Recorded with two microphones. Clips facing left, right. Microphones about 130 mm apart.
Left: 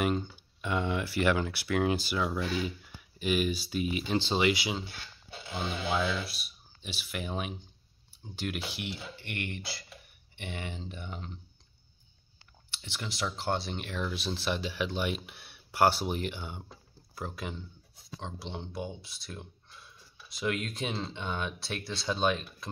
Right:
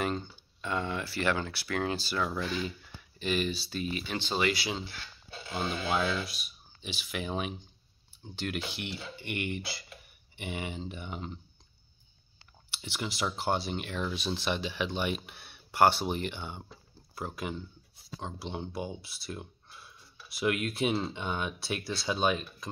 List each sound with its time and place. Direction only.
0.0 s speech: 10° left (ahead or behind)
4.0 s speech: 25° left (ahead or behind)
5.5 s speech: centre (ahead or behind)
12.8 s speech: 10° right (ahead or behind)